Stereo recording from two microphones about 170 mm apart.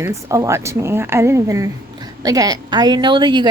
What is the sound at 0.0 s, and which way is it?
A woman's voice, 15° right (ahead or behind).